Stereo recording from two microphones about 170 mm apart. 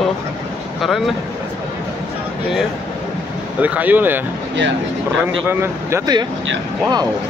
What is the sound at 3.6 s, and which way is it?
Speech, 10° right (ahead or behind).